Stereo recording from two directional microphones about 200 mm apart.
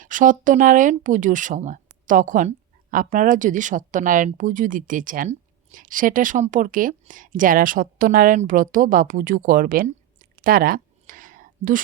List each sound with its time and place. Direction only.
0.0 s speech: 40° right (ahead or behind)